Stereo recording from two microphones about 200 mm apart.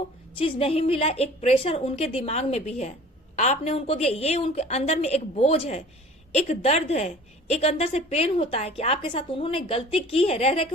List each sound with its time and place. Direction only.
0.3 s a woman's voice: 30° left (ahead or behind)